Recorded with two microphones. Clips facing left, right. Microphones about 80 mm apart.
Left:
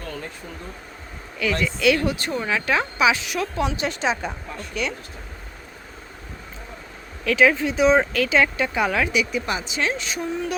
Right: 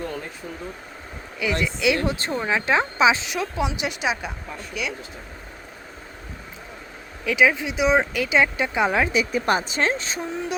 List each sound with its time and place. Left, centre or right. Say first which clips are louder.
1.4 s speech: left 1 dB; centre
7.3 s speech: left 2 dB; centre
9.3 s a woman's voice: right 4 dB; right